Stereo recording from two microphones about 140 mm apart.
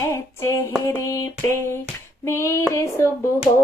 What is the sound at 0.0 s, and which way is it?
Child singing, 20° left (ahead or behind).